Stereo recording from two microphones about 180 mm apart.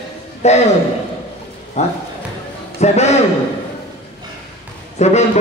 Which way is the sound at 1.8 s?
40° left (ahead or behind).